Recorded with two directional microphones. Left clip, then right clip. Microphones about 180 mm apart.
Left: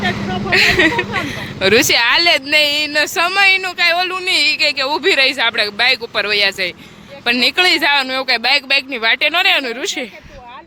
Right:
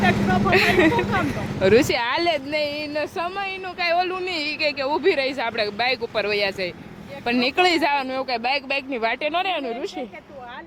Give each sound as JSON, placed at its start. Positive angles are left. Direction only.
{"t": 0.3, "sound": "speech", "side_deg": -15}
{"t": 3.8, "sound": "speech", "side_deg": -5}